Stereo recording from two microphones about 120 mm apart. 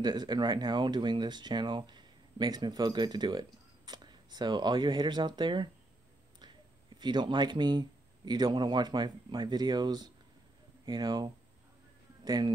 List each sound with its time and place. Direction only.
0.0 s speech: 35° right (ahead or behind)
7.0 s speech: 40° right (ahead or behind)